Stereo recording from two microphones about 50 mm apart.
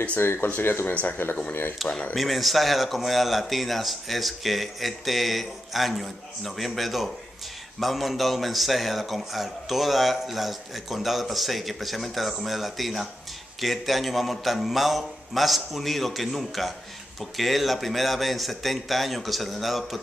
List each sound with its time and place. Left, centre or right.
0.2 s speech: left
1.8 s a man's voice: centre